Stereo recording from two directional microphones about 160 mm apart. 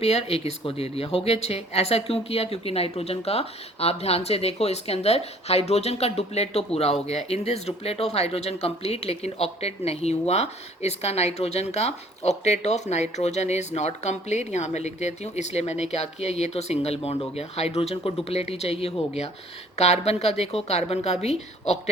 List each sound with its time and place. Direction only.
0.0 s a woman's voice: 40° left (ahead or behind)